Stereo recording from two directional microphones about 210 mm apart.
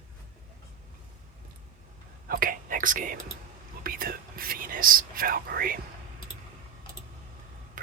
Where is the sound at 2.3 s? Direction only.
40° right (ahead or behind).